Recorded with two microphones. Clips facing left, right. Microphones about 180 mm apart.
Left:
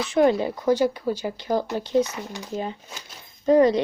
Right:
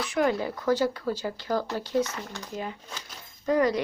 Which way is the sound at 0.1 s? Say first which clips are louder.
Left 7 dB; 25° left (ahead or behind).